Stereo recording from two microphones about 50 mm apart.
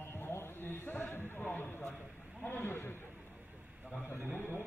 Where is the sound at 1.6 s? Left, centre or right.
Left.